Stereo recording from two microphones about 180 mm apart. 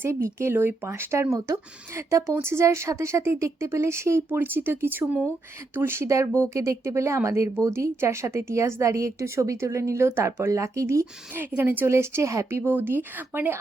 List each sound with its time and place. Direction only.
0.0 s speech: 15° right (ahead or behind)